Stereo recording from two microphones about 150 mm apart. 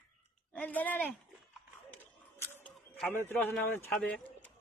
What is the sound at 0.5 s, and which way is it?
Speech, 10° left (ahead or behind).